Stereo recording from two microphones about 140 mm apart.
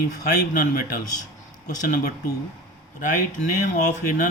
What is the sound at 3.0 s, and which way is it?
Speech, 65° left (ahead or behind).